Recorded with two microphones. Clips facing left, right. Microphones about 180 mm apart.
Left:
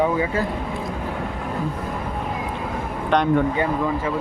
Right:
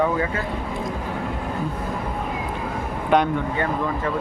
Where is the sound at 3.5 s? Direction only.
15° left (ahead or behind).